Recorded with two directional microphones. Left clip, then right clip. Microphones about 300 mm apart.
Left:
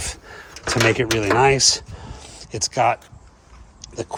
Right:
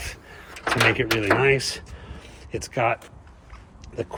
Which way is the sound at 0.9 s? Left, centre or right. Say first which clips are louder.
Left 3 dB; left.